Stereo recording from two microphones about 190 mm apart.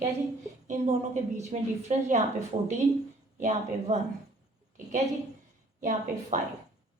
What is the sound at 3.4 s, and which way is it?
Speech, 40° right (ahead or behind).